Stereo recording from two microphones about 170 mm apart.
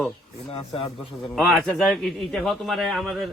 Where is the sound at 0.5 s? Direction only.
35° left (ahead or behind).